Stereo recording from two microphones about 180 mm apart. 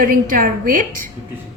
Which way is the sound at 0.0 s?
50° right (ahead or behind).